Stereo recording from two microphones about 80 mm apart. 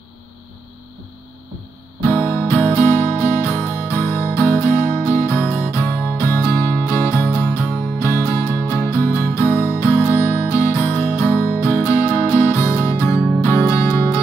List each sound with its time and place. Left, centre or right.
2.0 s guitar: left
2.8 s music: left
10.8 s music: left